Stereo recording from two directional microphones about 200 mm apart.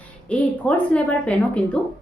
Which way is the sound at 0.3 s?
5° left (ahead or behind).